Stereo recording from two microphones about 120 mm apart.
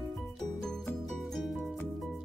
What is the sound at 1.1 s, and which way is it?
Music, centre (ahead or behind).